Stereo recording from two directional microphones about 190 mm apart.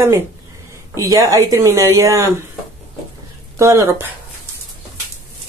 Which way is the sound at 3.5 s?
15° right (ahead or behind).